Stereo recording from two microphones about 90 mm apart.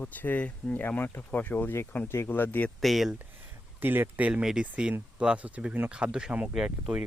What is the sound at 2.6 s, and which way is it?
Speech, centre (ahead or behind).